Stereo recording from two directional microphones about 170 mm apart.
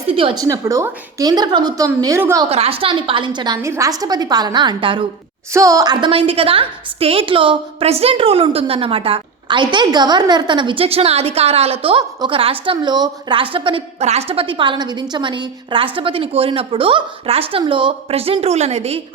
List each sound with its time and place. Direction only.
0.1 s a woman's voice: 30° right (ahead or behind)
0.4 s a woman's voice: 20° right (ahead or behind)
2.5 s a woman's voice: 35° right (ahead or behind)
5.5 s a woman's voice: 20° right (ahead or behind); by 18.9 s 40° right (ahead or behind)